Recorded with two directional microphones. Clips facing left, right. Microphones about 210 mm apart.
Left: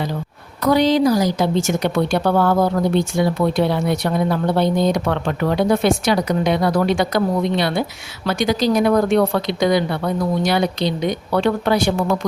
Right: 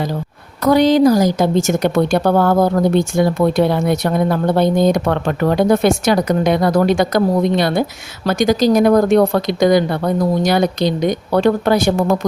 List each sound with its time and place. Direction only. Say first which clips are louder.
0.6 s a woman's voice: right 4 dB; 45° right (ahead or behind)